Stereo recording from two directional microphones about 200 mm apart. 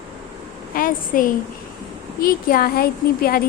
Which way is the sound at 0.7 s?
45° left (ahead or behind).